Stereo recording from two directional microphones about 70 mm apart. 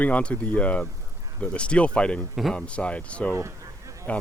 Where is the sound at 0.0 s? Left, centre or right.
Centre.